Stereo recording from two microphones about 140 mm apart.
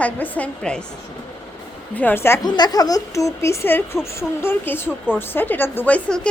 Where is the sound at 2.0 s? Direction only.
15° left (ahead or behind).